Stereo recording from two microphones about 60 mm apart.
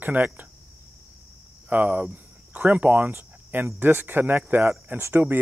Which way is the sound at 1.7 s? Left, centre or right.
Right.